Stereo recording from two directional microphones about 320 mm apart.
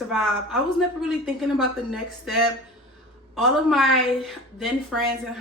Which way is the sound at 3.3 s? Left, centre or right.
Centre.